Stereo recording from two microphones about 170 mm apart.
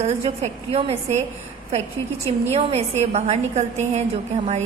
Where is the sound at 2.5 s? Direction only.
40° right (ahead or behind).